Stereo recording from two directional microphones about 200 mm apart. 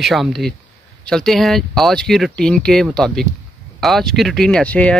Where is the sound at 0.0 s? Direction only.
Centre (ahead or behind).